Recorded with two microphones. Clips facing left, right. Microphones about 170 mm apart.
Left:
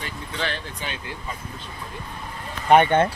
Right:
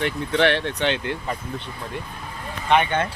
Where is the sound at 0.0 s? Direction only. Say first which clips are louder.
Right 10 dB; 70° right (ahead or behind).